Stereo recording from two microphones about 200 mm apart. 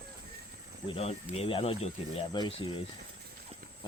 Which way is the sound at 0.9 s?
30° left (ahead or behind).